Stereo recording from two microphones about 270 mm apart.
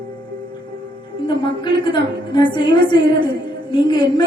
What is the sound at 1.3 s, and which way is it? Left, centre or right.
A woman's voice, centre.